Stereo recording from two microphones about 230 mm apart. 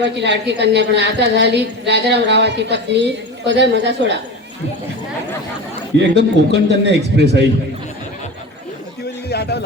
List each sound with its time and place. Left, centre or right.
0.0 s a woman's voice: right
6.0 s a woman's voice: right
9.3 s a sound: left